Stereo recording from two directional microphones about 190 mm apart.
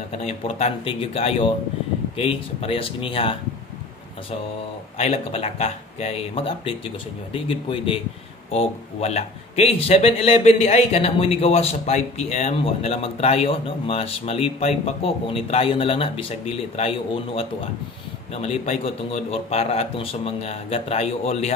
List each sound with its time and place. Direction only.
0.2 s a man's voice: 35° left (ahead or behind)
4.9 s a man's voice: 30° left (ahead or behind)